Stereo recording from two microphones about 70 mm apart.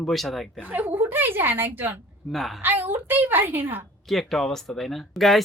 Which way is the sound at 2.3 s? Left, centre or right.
Centre.